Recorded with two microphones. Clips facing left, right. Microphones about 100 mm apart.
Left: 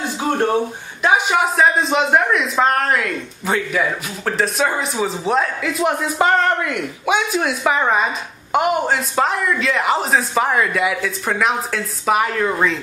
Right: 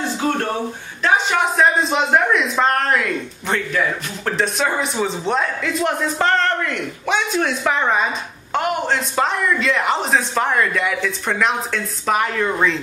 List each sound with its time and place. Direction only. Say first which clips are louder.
0.2 s a man's voice: left 5 dB; 15° left (ahead or behind)
1.6 s speech: even; centre (ahead or behind)